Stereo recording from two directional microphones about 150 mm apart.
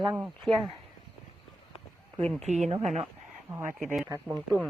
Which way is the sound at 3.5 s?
15° right (ahead or behind).